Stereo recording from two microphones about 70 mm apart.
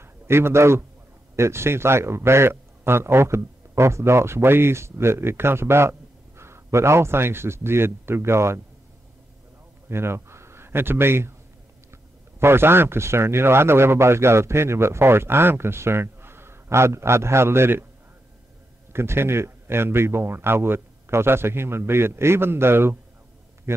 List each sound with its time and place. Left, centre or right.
0.0 s a man's voice: right
9.8 s a man's voice: right
18.9 s a man's voice: right